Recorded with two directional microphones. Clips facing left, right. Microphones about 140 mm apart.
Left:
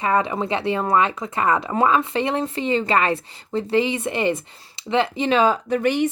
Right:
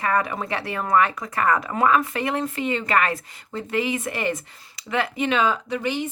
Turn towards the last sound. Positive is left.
turn(degrees=55)  # may be behind; listen again after turning